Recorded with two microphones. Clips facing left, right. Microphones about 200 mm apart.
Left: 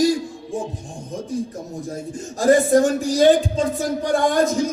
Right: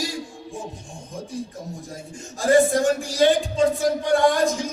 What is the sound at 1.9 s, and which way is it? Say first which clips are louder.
A man's voice: left 7 dB; 45° left (ahead or behind).